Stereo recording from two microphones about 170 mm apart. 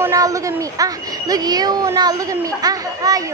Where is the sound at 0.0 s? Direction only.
20° right (ahead or behind).